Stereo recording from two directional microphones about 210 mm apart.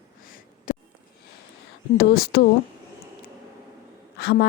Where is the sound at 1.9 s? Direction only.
45° left (ahead or behind).